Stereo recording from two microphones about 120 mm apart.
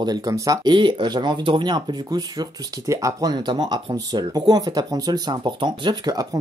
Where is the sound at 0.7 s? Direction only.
45° right (ahead or behind).